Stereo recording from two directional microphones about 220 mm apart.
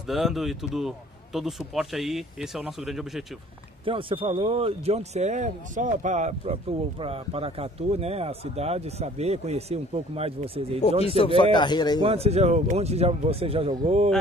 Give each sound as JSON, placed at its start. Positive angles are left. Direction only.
{"t": 0.1, "sound": "speech", "side_deg": 0}
{"t": 3.8, "sound": "speech", "side_deg": -25}
{"t": 11.0, "sound": "speech", "side_deg": 25}
{"t": 12.0, "sound": "speech", "side_deg": -25}